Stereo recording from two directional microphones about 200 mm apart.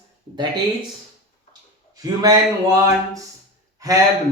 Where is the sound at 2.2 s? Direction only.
20° right (ahead or behind).